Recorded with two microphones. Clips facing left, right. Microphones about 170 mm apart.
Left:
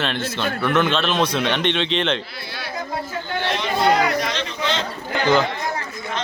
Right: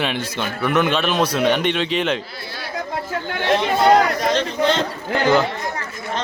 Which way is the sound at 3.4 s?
45° right (ahead or behind).